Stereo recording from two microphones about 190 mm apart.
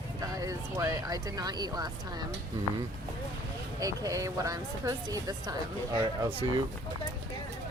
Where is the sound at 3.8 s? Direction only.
15° right (ahead or behind).